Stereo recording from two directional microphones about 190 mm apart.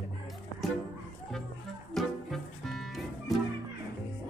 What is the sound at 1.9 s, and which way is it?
Music, centre (ahead or behind).